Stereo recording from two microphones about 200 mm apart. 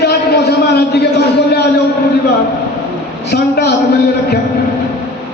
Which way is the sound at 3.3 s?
55° left (ahead or behind).